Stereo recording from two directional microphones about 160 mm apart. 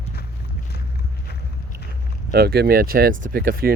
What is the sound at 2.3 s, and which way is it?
Speech, 80° right.